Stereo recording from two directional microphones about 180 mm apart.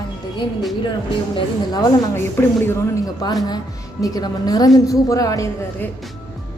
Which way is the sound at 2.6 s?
15° left (ahead or behind).